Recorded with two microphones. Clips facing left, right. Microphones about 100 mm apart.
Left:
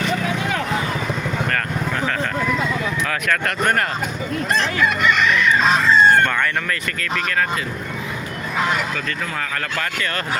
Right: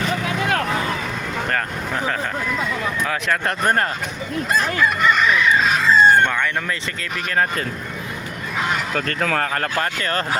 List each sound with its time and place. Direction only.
3.1 s speech: 20° right (ahead or behind)
5.8 s chicken: centre (ahead or behind)
6.2 s speech: 15° right (ahead or behind)
9.4 s speech: 40° right (ahead or behind)